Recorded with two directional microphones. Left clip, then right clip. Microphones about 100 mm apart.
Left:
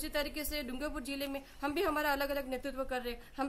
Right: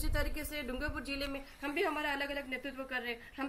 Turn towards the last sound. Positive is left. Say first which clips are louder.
# left 1 dB
turn(degrees=35)  # may be behind; listen again after turning